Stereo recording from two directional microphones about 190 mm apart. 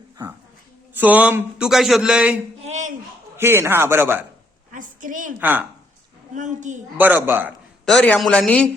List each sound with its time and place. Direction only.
0.9 s speech: 10° right (ahead or behind)
2.6 s a sound: 35° right (ahead or behind)
3.3 s a man's voice: 15° right (ahead or behind)
4.7 s a sound: 45° right (ahead or behind)
5.4 s a man's voice: 10° right (ahead or behind)
6.3 s a woman's voice: 40° right (ahead or behind)
6.9 s a man's voice: 10° right (ahead or behind)
7.9 s speech: 5° left (ahead or behind)